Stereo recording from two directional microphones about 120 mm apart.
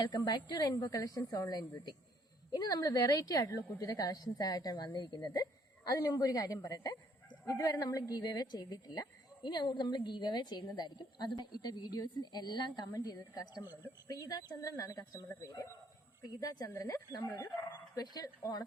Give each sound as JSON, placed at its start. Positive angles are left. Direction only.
{"t": 0.0, "sound": "a woman's voice", "side_deg": 35}